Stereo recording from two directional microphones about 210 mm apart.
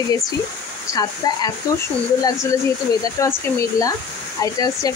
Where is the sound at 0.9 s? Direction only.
20° left (ahead or behind).